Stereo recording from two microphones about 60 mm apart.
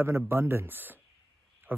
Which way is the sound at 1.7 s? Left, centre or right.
Right.